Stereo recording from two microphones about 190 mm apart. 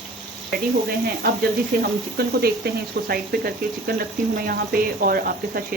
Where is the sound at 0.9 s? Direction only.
55° right (ahead or behind).